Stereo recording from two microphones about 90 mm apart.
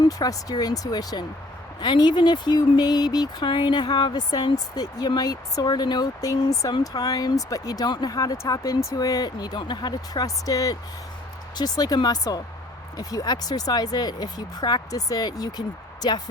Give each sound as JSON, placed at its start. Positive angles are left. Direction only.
{"t": 0.0, "sound": "speech", "side_deg": 45}
{"t": 1.8, "sound": "speech", "side_deg": 60}
{"t": 10.2, "sound": "speech", "side_deg": 40}